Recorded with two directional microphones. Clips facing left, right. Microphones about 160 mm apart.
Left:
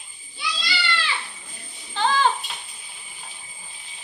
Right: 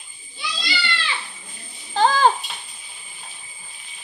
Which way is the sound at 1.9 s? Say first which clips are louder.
Right 4 dB; 40° right (ahead or behind).